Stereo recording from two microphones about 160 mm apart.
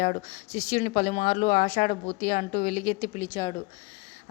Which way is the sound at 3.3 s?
30° left (ahead or behind).